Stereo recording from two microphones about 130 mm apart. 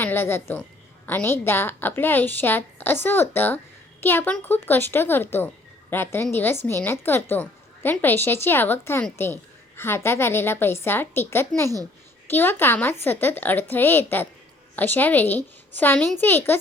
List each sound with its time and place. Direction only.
0.0 s a woman's voice: 15° left (ahead or behind)